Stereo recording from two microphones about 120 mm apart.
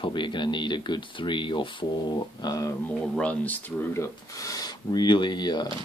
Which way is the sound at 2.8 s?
10° left (ahead or behind).